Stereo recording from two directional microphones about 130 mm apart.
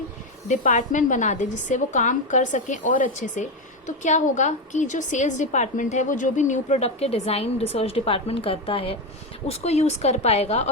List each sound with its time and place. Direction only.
0.4 s a woman's voice: 75° left (ahead or behind)
3.8 s a woman's voice: 70° left (ahead or behind); by 10.7 s 55° left (ahead or behind)